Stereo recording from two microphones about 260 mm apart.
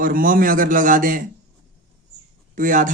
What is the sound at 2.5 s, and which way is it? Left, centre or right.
Speech, right.